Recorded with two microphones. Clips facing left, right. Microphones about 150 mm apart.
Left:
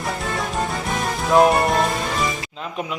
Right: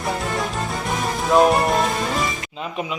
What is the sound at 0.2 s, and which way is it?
Music, centre (ahead or behind).